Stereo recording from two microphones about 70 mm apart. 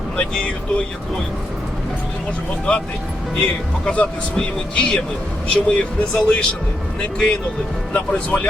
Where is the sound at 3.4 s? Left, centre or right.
Centre.